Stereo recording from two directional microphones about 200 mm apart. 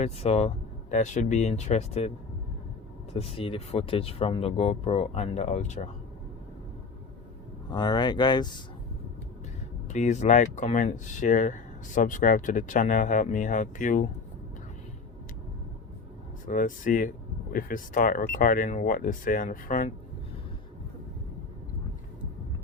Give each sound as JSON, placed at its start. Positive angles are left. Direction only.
{"t": 0.0, "sound": "speech", "side_deg": 30}
{"t": 7.7, "sound": "speech", "side_deg": 20}
{"t": 9.9, "sound": "speech", "side_deg": 35}
{"t": 16.5, "sound": "speech", "side_deg": 40}